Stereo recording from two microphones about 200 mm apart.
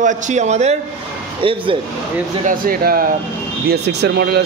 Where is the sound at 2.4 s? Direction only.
45° right (ahead or behind).